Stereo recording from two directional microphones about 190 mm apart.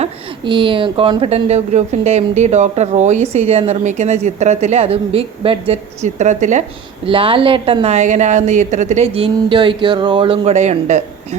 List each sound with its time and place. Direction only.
0.0 s speech: 25° right (ahead or behind)